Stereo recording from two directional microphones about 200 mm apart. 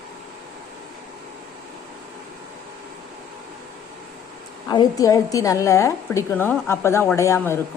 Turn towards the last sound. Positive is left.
turn(degrees=15)  # may be behind; listen again after turning